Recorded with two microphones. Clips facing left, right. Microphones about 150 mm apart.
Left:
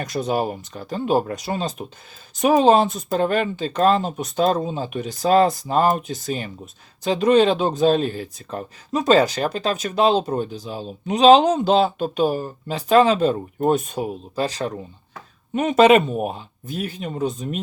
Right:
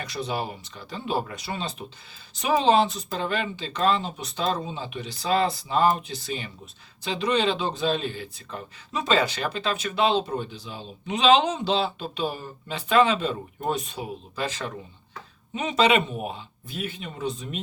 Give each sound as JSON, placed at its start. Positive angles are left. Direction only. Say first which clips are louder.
{"t": 0.0, "sound": "speech", "louder": "left 7 dB", "side_deg": 45}
{"t": 15.5, "sound": "speech", "louder": "left 8 dB", "side_deg": 50}